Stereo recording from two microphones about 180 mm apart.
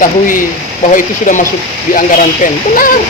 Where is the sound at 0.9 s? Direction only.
45° left (ahead or behind).